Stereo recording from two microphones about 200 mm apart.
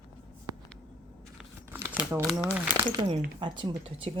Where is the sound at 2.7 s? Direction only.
20° left (ahead or behind).